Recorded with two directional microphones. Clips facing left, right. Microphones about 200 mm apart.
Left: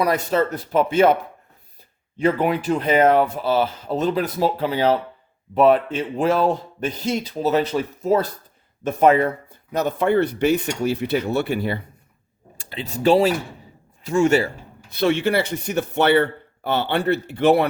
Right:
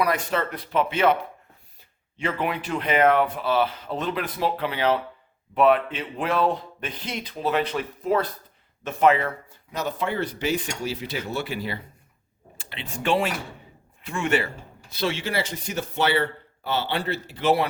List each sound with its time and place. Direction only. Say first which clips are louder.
0.0 s speech: left 5 dB; 35° left (ahead or behind)
8.8 s speech: left 4 dB; 50° left (ahead or behind)
12.8 s a man's voice: left 8 dB; 40° left (ahead or behind)
14.9 s speech: left 7 dB; 60° left (ahead or behind)